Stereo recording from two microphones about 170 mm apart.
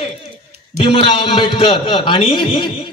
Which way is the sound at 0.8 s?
30° left (ahead or behind).